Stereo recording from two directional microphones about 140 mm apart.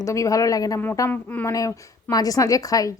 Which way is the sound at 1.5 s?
25° left (ahead or behind).